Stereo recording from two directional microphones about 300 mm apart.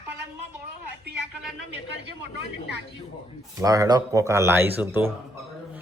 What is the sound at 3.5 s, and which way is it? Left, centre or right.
Speech, centre.